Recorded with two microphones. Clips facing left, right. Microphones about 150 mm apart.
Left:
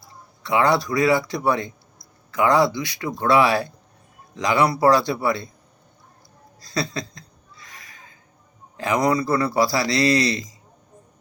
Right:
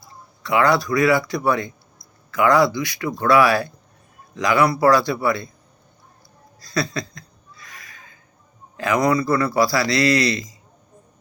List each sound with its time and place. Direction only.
0.4 s speech: 25° left (ahead or behind)
6.6 s a sound: 25° left (ahead or behind)
8.8 s speech: 25° left (ahead or behind)